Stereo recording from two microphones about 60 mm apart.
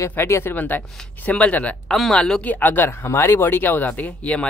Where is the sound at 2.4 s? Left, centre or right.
Left.